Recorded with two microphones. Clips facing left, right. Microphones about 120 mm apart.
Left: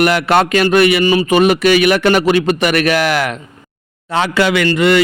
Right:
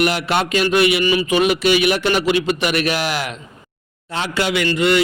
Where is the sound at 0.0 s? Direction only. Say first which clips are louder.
Left 6 dB; 55° left (ahead or behind).